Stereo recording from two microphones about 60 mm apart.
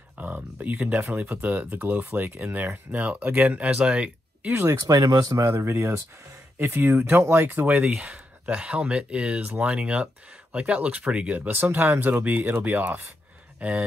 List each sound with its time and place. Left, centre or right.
0.2 s speech: right
3.7 s speech: centre
4.7 s speech: right
5.5 s speech: right